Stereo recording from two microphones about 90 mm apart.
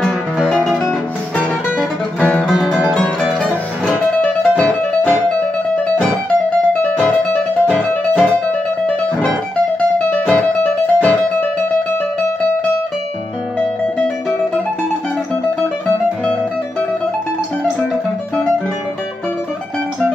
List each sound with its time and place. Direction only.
0.5 s music: centre (ahead or behind)
1.8 s guitar: 10° left (ahead or behind)
2.4 s music: 5° right (ahead or behind)
2.8 s music: 10° left (ahead or behind)
6.8 s music: 15° left (ahead or behind)
13.9 s music: 10° left (ahead or behind)